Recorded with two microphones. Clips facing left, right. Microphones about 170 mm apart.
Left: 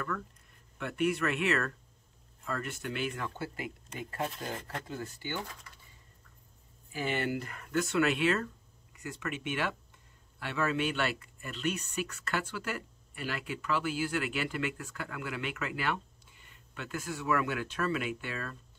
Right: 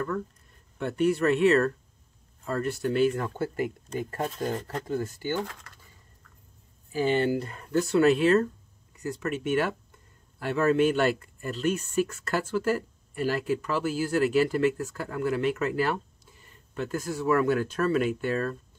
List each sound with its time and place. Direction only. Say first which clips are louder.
0.7 s speech: right 6 dB; 35° right (ahead or behind)
5.4 s speech: right 8 dB; 90° right
6.9 s speech: right 8 dB; 30° right (ahead or behind)